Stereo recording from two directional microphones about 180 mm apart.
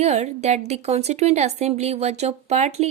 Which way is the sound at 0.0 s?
40° right (ahead or behind).